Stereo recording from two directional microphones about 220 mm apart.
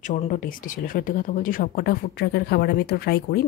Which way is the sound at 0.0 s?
35° left (ahead or behind).